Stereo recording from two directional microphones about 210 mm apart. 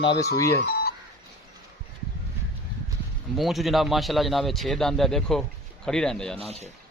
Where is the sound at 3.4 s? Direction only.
Centre (ahead or behind).